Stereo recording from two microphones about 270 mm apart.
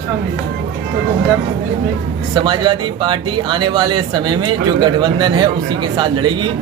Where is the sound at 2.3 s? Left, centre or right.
Centre.